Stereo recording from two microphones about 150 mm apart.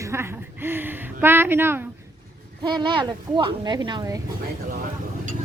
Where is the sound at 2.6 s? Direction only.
30° right (ahead or behind).